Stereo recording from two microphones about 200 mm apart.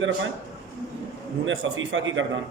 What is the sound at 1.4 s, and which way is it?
Speech, 70° right (ahead or behind).